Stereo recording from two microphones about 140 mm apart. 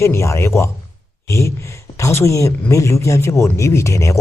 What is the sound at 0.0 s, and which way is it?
A man's voice, 20° left (ahead or behind).